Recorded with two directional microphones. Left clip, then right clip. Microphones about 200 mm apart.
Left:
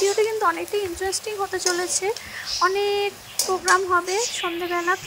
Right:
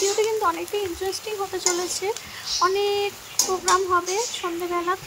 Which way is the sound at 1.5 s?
15° left (ahead or behind).